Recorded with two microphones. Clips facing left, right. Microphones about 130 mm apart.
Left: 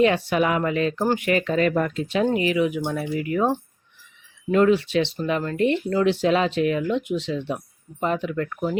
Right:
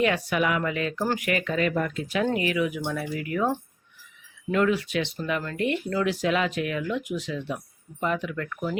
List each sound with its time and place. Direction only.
0.0 s speech: 30° left (ahead or behind)